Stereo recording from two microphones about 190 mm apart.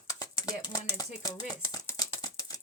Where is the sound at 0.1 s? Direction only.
15° left (ahead or behind).